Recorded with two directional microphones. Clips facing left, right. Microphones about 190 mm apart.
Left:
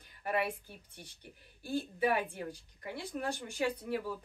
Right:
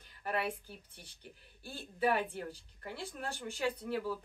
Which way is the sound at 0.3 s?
10° left (ahead or behind).